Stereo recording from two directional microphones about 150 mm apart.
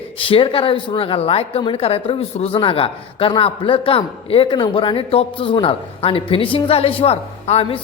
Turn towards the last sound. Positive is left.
turn(degrees=40)  # may be behind; listen again after turning